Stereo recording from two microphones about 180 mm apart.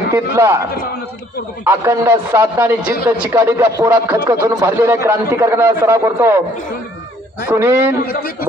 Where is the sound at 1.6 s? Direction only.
15° right (ahead or behind).